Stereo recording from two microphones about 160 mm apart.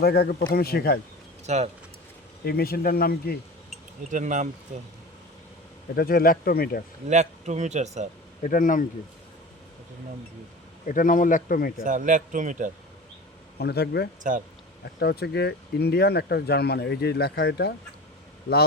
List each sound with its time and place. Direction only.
0.0 s speech: 75° left (ahead or behind)
1.5 s a man's voice: 45° right (ahead or behind)
2.4 s speech: 75° left (ahead or behind)
4.1 s a man's voice: 50° right (ahead or behind)
6.0 s speech: 70° left (ahead or behind)
7.1 s a man's voice: 45° right (ahead or behind)
8.4 s speech: 55° left (ahead or behind)
10.8 s speech: 55° left (ahead or behind)
11.9 s a man's voice: 55° right (ahead or behind)
13.6 s speech: 90° left